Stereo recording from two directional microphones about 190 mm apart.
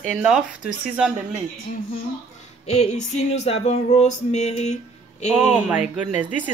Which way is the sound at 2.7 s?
35° left (ahead or behind).